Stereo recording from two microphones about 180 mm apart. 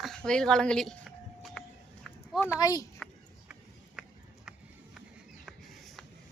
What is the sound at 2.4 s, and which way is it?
Speech, 20° left (ahead or behind).